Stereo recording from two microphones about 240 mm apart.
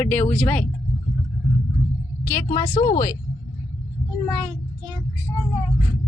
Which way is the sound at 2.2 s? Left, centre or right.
Centre.